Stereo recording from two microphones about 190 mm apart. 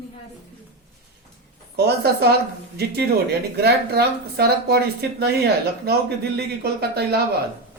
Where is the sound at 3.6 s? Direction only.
55° right (ahead or behind).